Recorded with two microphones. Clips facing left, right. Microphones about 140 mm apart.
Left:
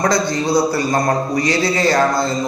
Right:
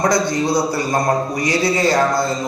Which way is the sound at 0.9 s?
10° right (ahead or behind).